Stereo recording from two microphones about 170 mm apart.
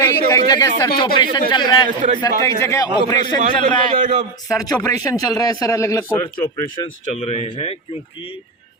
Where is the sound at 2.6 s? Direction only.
20° left (ahead or behind).